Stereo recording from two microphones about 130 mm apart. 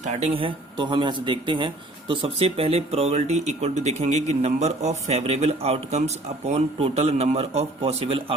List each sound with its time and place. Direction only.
0.0 s speech: 60° right (ahead or behind)